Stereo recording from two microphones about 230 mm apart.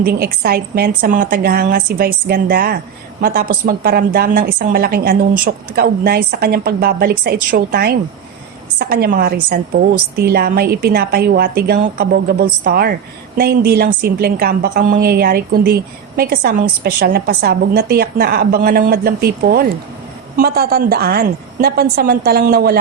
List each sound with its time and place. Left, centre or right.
0.0 s a woman's voice: right